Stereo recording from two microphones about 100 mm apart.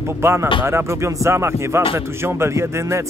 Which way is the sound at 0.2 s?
25° right (ahead or behind).